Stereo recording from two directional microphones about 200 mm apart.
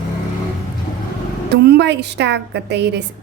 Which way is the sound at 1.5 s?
55° right (ahead or behind).